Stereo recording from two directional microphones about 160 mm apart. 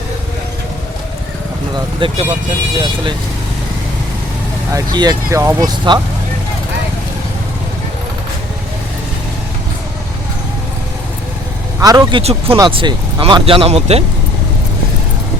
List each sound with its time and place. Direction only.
2.0 s speech: 30° right (ahead or behind)
4.7 s speech: 25° right (ahead or behind)
11.8 s speech: 20° right (ahead or behind)
12.2 s speech: 40° right (ahead or behind)
12.5 s speech: 25° right (ahead or behind)